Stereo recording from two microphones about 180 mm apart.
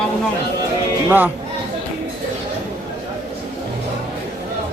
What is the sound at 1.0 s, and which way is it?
Speech, 10° right (ahead or behind).